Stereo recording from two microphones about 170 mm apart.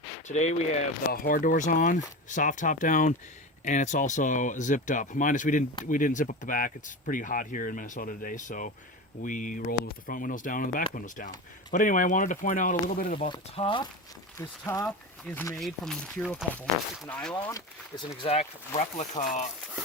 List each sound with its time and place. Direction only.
0.3 s speech: 40° left (ahead or behind)
1.1 s speech: 60° left (ahead or behind)
13.3 s speech: 30° left (ahead or behind)
14.3 s speech: 20° left (ahead or behind)
14.8 s speech: 5° left (ahead or behind)
17.3 s speech: 25° left (ahead or behind)
18.7 s speech: 45° left (ahead or behind)